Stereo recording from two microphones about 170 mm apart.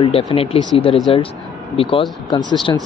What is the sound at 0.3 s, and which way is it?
Speech, 35° left (ahead or behind).